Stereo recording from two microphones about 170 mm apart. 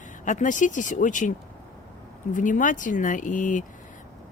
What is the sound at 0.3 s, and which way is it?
Speech, 50° left (ahead or behind).